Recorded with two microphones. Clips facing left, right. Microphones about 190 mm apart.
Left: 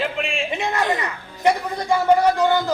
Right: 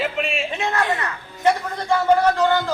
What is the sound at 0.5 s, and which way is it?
A woman's voice, 15° left (ahead or behind).